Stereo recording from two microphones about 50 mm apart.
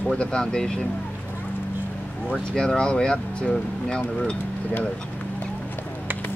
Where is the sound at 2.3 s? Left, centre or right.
Centre.